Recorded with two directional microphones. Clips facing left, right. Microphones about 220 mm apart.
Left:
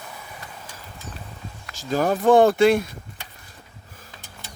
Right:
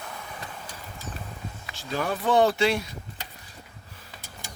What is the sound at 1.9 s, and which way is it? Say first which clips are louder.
Speech: left 7 dB; 40° left (ahead or behind).